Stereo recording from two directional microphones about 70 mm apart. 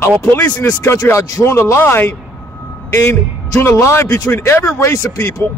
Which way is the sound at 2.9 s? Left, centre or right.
Left.